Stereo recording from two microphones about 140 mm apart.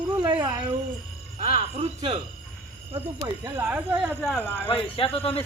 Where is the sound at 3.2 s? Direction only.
25° right (ahead or behind).